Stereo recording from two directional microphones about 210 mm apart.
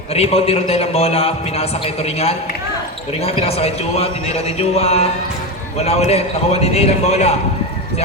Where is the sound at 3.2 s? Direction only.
30° left (ahead or behind).